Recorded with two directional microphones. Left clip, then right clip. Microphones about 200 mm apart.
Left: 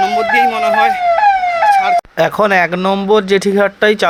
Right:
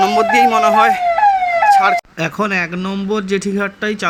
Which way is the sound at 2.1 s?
5° left (ahead or behind).